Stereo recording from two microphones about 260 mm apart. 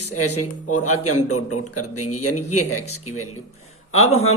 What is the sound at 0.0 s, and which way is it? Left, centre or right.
A man's voice, left.